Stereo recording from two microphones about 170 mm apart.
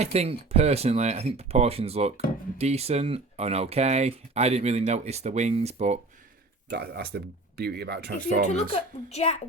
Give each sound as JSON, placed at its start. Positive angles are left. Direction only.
{"t": 0.0, "sound": "speech", "side_deg": -35}
{"t": 6.7, "sound": "speech", "side_deg": -70}
{"t": 8.7, "sound": "a woman's voice", "side_deg": 40}